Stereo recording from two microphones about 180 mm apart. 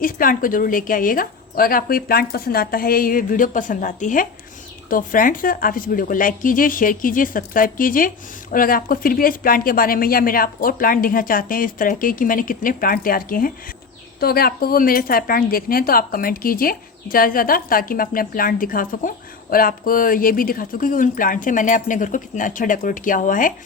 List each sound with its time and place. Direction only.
0.0 s a woman's voice: 50° left (ahead or behind)